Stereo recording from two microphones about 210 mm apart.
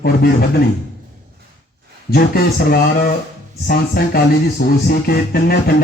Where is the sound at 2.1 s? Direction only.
45° left (ahead or behind).